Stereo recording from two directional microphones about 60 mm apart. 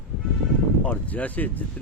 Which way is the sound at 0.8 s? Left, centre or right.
Left.